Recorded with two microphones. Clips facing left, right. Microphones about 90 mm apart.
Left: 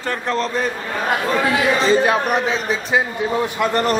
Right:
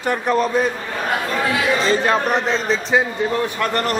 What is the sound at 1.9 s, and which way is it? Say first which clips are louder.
A man's voice: left 2 dB; 10° left (ahead or behind).